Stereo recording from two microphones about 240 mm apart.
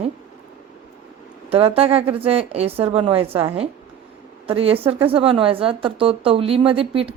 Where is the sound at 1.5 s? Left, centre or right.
Right.